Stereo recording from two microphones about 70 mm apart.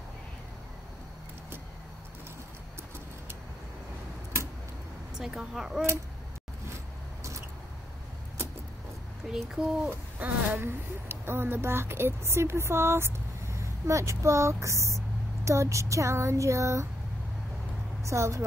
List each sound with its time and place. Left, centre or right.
5.1 s speech: centre
9.3 s a sound: centre
9.8 s owl: right
10.6 s speech: right
18.0 s speech: right